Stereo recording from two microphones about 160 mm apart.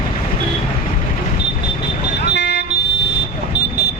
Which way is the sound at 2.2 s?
90° left.